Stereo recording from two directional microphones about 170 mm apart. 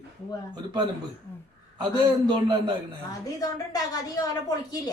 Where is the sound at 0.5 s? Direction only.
25° right (ahead or behind).